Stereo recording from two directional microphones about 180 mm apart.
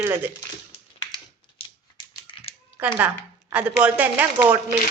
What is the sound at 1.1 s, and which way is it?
Typewriter, 30° left (ahead or behind).